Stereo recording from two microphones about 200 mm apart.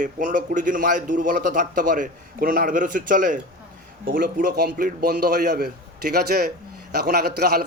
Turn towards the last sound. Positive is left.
turn(degrees=-55)  # may be behind; listen again after turning